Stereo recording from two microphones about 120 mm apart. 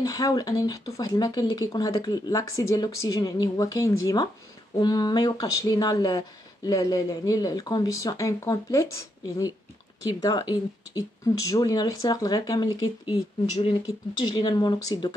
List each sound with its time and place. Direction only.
0.0 s speech: 30° left (ahead or behind)